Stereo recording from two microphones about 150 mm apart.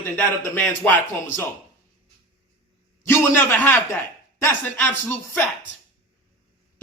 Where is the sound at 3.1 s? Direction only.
15° left (ahead or behind).